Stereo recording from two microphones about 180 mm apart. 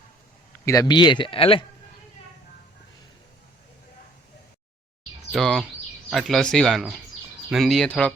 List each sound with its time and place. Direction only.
0.6 s speech: 20° left (ahead or behind)
5.3 s speech: centre (ahead or behind)